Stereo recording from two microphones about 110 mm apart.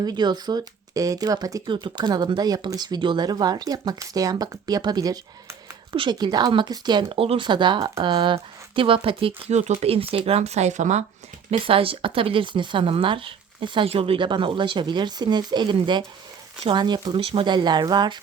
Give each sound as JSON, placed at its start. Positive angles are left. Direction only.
{"t": 0.0, "sound": "speech", "side_deg": -40}
{"t": 1.6, "sound": "speech", "side_deg": -45}
{"t": 7.2, "sound": "speech", "side_deg": -55}
{"t": 9.5, "sound": "speech", "side_deg": -90}
{"t": 9.8, "sound": "speech", "side_deg": -60}
{"t": 11.5, "sound": "speech", "side_deg": -55}